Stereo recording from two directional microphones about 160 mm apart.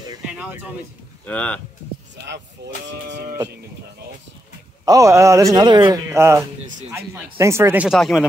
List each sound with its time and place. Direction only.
0.3 s speech: 10° right (ahead or behind)
1.2 s speech: 10° left (ahead or behind)
2.6 s speech: 90° right
4.8 s a man's voice: 20° right (ahead or behind)
6.0 s speech: 15° right (ahead or behind)